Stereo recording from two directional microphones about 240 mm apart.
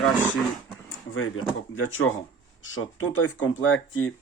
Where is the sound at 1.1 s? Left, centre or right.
Left.